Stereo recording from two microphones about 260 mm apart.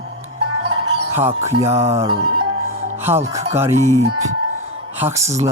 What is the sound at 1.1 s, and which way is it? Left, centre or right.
Speech, centre.